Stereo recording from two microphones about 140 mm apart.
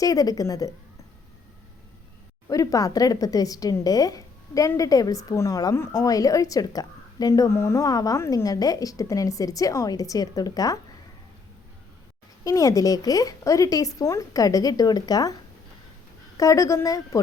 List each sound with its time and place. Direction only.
0.0 s speech: 25° left (ahead or behind)
2.5 s speech: 25° left (ahead or behind)
12.5 s speech: 25° left (ahead or behind)
16.4 s speech: 25° left (ahead or behind)